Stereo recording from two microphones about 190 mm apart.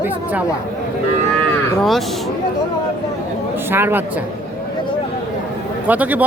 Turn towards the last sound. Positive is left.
turn(degrees=-10)  # may be behind; listen again after turning